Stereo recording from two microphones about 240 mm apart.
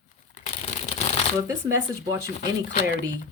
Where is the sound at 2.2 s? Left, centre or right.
Left.